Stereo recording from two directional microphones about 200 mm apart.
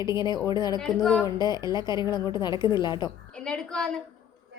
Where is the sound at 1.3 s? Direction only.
20° left (ahead or behind).